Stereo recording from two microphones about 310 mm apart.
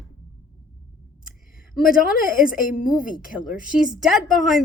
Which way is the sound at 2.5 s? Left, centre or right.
Left.